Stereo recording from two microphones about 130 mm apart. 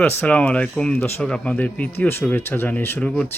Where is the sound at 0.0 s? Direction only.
15° left (ahead or behind).